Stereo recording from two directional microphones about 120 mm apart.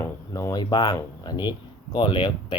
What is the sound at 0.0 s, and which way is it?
Speech, 25° left (ahead or behind).